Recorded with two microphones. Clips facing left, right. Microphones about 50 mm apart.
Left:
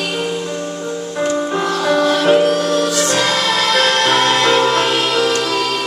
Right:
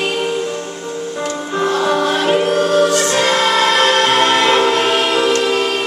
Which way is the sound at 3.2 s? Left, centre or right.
Right.